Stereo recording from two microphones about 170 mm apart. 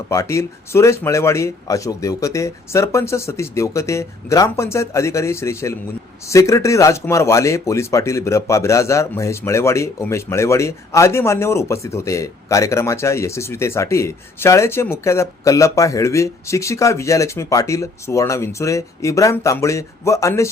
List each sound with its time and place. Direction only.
0.1 s speech: 15° left (ahead or behind)